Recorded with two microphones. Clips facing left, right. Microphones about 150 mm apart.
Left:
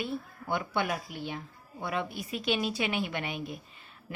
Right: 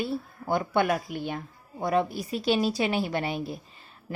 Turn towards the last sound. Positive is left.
turn(degrees=-35)  # may be behind; listen again after turning